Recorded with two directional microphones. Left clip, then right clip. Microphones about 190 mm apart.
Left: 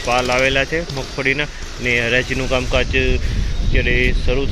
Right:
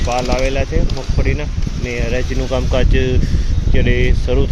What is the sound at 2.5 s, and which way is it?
Speech, 15° right (ahead or behind).